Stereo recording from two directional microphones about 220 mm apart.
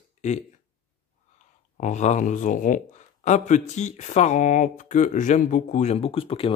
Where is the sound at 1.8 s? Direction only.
30° left (ahead or behind).